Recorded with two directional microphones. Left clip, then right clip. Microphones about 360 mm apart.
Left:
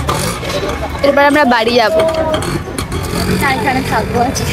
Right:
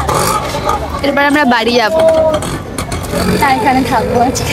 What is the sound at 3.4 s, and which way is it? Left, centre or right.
Speech, centre.